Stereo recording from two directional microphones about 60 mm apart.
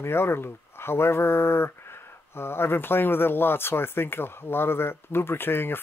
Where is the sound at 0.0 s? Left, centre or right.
Left.